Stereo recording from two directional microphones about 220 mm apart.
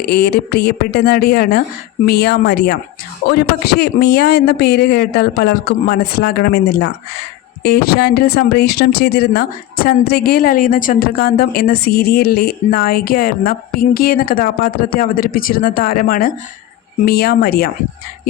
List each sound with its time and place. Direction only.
0.0 s speech: 45° left (ahead or behind)